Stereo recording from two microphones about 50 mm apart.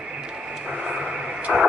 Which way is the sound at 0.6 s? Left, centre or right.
Centre.